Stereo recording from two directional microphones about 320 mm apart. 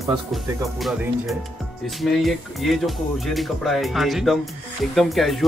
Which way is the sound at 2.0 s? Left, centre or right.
Centre.